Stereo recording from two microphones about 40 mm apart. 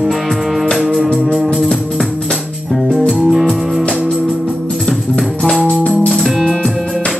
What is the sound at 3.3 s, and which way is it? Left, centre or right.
Music, centre.